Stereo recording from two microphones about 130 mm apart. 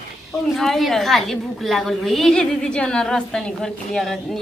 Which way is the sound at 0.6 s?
Centre (ahead or behind).